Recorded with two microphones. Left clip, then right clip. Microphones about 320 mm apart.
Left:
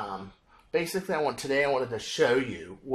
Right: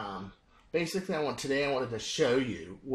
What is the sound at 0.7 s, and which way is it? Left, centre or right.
Speech, left.